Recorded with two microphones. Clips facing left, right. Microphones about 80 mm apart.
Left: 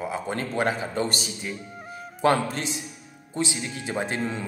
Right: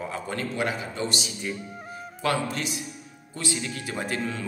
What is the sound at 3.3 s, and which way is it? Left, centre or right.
Speech, left.